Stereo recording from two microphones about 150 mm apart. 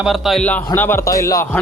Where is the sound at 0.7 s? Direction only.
15° left (ahead or behind).